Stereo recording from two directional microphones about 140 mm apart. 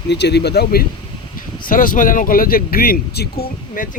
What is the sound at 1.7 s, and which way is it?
Speech, 80° left.